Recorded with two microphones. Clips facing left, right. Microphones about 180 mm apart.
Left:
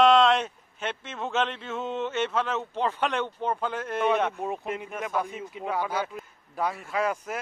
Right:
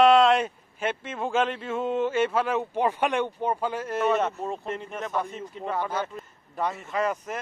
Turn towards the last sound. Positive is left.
turn(degrees=5)  # may be behind; listen again after turning